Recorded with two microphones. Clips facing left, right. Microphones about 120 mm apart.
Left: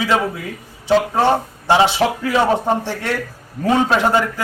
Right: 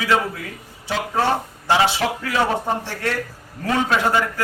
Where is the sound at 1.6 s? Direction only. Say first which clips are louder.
Left 4 dB; 25° left (ahead or behind).